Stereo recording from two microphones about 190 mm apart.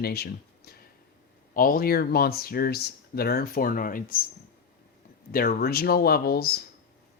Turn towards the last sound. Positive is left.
turn(degrees=55)  # may be behind; listen again after turning